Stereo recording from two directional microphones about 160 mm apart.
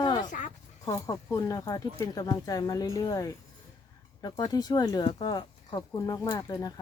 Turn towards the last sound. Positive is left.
turn(degrees=20)  # may be behind; listen again after turning